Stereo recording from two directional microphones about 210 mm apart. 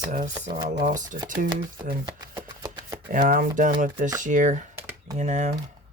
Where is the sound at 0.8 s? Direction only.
35° right (ahead or behind).